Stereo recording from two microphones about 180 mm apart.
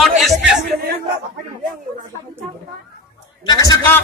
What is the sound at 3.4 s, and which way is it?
Speech, 20° left (ahead or behind).